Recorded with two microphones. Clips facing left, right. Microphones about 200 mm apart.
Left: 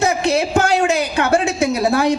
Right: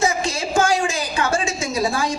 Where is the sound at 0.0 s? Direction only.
65° left (ahead or behind).